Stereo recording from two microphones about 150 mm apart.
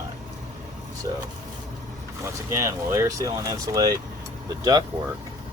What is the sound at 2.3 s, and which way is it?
Speech, 20° right (ahead or behind).